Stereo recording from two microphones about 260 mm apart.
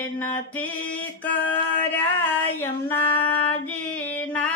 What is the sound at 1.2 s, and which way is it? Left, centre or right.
Female singing, centre.